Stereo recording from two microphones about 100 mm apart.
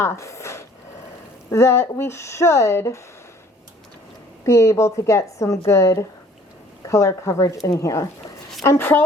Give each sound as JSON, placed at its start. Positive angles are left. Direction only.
{"t": 0.0, "sound": "a woman's voice", "side_deg": 30}
{"t": 4.4, "sound": "a woman's voice", "side_deg": 25}